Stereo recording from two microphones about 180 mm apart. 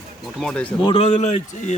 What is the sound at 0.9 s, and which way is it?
Speech, 35° left (ahead or behind).